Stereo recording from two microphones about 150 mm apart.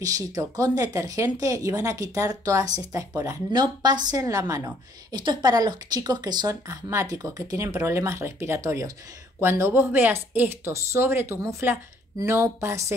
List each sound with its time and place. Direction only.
0.0 s a woman's voice: 25° right (ahead or behind)